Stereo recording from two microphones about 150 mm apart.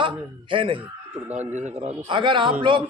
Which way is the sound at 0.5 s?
35° right (ahead or behind).